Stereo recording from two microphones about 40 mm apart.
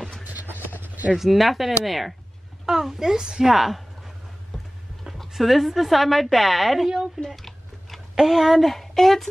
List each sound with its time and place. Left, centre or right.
0.3 s a sound: right
1.1 s a woman's voice: centre
2.6 s a woman's voice: centre
3.5 s a woman's voice: centre
5.3 s a woman's voice: centre
7.2 s a sound: centre
8.2 s a woman's voice: centre